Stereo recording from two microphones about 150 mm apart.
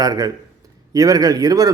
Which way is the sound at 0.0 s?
25° right (ahead or behind).